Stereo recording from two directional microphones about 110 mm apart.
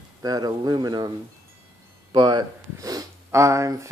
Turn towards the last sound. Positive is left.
turn(degrees=-25)  # may be behind; listen again after turning